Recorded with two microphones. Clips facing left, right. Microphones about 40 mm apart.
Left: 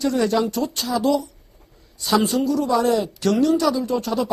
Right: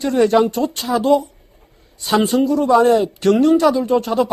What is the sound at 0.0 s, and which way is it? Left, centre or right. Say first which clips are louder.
Speech: right 6 dB; right.